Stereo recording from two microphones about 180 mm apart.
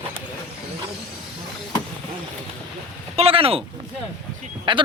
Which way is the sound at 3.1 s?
35° right (ahead or behind).